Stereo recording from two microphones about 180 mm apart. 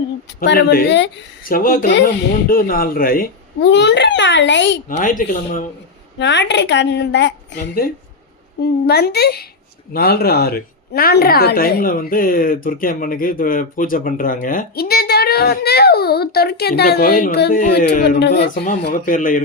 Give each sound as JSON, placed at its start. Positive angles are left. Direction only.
{"t": 0.3, "sound": "a woman's voice", "side_deg": 60}
{"t": 1.5, "sound": "speech", "side_deg": 50}
{"t": 2.5, "sound": "speech", "side_deg": 55}
{"t": 3.6, "sound": "a child's voice", "side_deg": 75}
{"t": 4.9, "sound": "speech", "side_deg": 45}
{"t": 6.1, "sound": "a woman's voice", "side_deg": 75}
{"t": 8.6, "sound": "a woman's voice", "side_deg": 65}
{"t": 18.2, "sound": "a woman's voice", "side_deg": 65}
{"t": 19.0, "sound": "speech", "side_deg": 50}